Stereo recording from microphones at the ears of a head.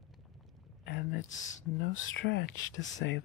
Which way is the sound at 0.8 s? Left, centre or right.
Left.